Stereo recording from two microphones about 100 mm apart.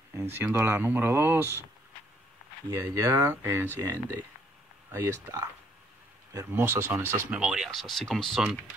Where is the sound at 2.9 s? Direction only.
30° right (ahead or behind).